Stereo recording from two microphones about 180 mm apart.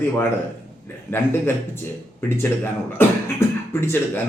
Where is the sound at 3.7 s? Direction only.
10° left (ahead or behind).